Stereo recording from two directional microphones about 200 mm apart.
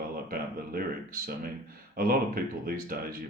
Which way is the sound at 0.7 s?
50° right (ahead or behind).